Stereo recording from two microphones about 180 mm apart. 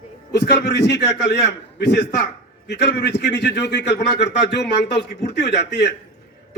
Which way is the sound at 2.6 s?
70° left (ahead or behind).